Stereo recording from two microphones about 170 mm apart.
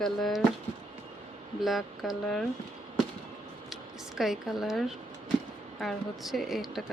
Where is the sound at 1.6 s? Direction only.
Centre (ahead or behind).